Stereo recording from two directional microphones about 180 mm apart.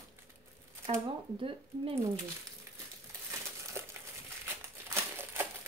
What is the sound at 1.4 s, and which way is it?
Speech, 30° right (ahead or behind).